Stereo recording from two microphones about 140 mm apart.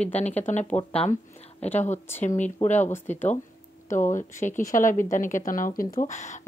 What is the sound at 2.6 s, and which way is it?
A woman's voice, 55° left (ahead or behind).